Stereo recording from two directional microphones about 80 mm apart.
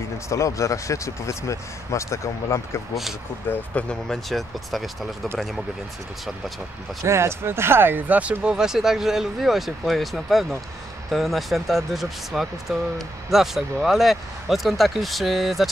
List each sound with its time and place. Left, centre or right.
0.3 s speech: left
3.5 s speech: left
3.9 s speech: centre
7.1 s speech: right; by 15.7 s centre